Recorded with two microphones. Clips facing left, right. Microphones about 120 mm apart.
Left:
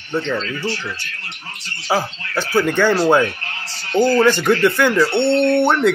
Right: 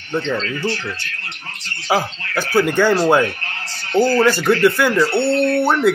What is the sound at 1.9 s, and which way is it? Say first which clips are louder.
Speech: right 1 dB; 15° right (ahead or behind).